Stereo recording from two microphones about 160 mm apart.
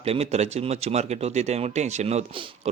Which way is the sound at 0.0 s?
40° right (ahead or behind).